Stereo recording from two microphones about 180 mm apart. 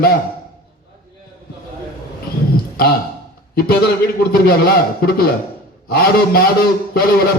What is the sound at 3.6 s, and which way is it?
Speech, 60° left (ahead or behind).